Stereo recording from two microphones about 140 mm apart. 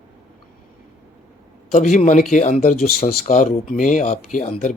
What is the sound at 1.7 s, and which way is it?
Speech, 60° left (ahead or behind).